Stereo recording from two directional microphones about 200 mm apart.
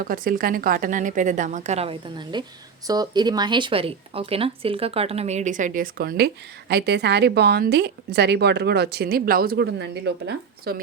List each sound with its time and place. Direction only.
0.0 s a woman's voice: 45° right (ahead or behind)